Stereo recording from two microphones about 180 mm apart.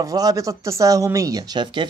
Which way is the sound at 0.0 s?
20° right (ahead or behind).